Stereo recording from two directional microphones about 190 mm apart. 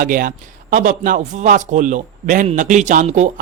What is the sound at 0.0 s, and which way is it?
A man's voice, 45° right (ahead or behind).